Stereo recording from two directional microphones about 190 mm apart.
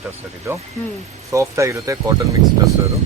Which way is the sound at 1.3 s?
15° right (ahead or behind).